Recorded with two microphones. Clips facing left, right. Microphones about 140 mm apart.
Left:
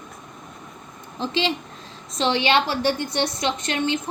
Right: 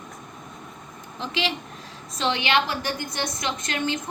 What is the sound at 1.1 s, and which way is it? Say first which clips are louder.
A woman's voice: left 4 dB; 30° left (ahead or behind).